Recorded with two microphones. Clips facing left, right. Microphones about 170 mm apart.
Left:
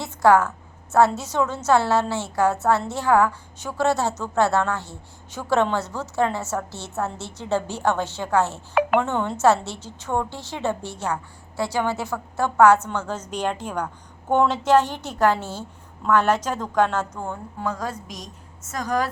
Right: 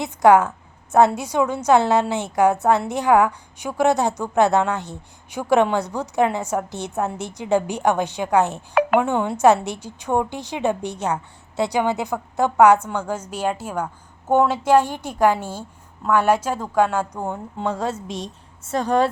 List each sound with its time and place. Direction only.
0.0 s a woman's voice: 15° right (ahead or behind)